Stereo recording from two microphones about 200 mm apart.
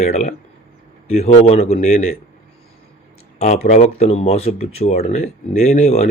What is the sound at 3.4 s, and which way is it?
Speech, 35° left (ahead or behind).